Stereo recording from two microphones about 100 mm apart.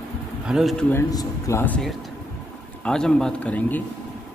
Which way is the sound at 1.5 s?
30° left (ahead or behind).